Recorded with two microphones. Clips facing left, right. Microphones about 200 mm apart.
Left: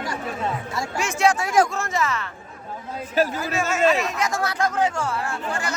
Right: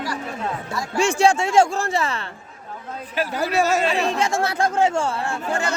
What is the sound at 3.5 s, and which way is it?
Speech, 35° right (ahead or behind).